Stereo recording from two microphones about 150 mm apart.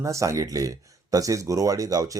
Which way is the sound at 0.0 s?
20° right (ahead or behind).